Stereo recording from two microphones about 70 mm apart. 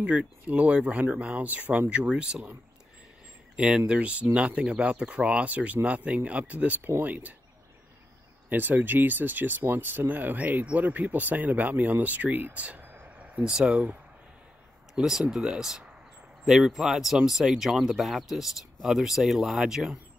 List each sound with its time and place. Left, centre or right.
0.0 s speech: centre
3.5 s speech: centre
8.5 s speech: right
15.0 s speech: centre